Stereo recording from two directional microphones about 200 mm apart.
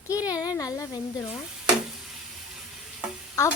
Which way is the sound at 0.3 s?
20° left (ahead or behind).